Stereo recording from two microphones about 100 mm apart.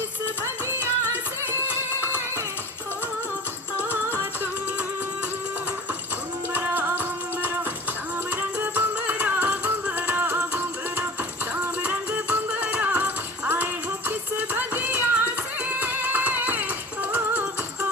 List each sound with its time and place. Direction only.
0.4 s music: 25° right (ahead or behind)
1.6 s music: 25° left (ahead or behind)
6.5 s music: 20° right (ahead or behind)